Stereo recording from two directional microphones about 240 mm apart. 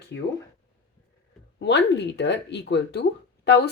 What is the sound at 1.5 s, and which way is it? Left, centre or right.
Speech, left.